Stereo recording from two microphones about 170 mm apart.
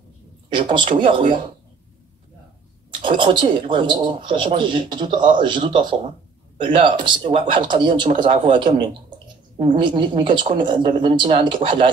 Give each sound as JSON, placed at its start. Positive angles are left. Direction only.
{"t": 0.5, "sound": "speech", "side_deg": -30}
{"t": 2.9, "sound": "speech", "side_deg": -30}